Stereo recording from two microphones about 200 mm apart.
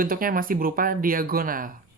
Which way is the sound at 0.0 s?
45° right (ahead or behind).